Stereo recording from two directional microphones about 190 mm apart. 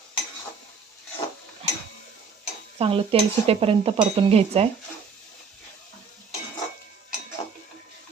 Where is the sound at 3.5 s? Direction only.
30° right (ahead or behind).